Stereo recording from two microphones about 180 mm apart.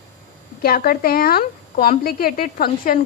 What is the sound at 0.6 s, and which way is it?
A woman's voice, 55° left (ahead or behind).